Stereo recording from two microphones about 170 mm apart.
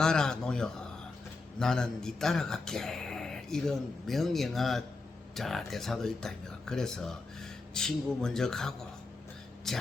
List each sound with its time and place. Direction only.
0.0 s speech: 5° left (ahead or behind)